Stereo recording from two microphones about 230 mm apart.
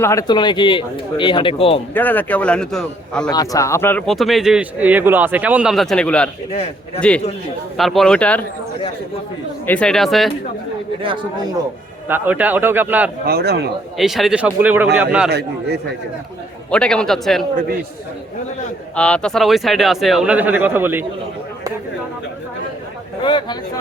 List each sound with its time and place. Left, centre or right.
0.0 s speech: centre
1.9 s a man's voice: centre
3.2 s a man's voice: centre
6.5 s speech: left
7.8 s a man's voice: centre
9.6 s a man's voice: centre
11.0 s speech: right
12.0 s a man's voice: centre
13.2 s a man's voice: right
14.0 s a man's voice: centre
15.3 s a man's voice: right
16.7 s a man's voice: centre
18.9 s a man's voice: centre
23.2 s speech: left